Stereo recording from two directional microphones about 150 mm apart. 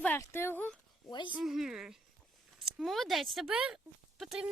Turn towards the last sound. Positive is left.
turn(degrees=0)  # may be behind; listen again after turning